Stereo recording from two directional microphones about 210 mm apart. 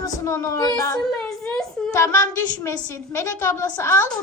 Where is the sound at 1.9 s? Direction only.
15° left (ahead or behind).